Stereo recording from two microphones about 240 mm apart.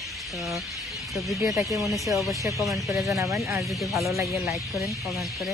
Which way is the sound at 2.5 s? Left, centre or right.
Centre.